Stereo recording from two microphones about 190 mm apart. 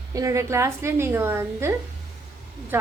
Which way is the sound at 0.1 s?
15° right (ahead or behind).